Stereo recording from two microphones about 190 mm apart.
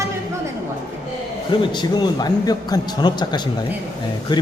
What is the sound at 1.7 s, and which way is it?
Speech, 25° left (ahead or behind).